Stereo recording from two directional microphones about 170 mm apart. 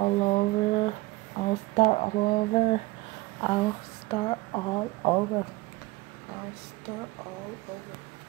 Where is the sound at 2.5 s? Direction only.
40° left (ahead or behind).